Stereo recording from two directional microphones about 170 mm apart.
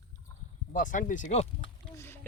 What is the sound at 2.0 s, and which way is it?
Boat, 15° left (ahead or behind).